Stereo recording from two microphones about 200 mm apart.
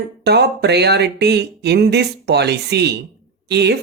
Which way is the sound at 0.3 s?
55° right (ahead or behind).